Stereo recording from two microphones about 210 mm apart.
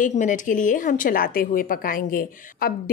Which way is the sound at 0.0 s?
35° left (ahead or behind).